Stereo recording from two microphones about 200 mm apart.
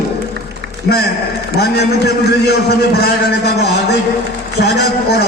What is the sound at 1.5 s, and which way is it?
A man's voice, 50° left (ahead or behind).